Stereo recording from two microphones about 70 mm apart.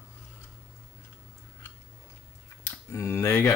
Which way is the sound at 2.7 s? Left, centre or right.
Left.